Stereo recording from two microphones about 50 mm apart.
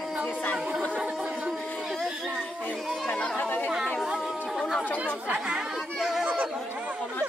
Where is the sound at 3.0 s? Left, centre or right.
Left.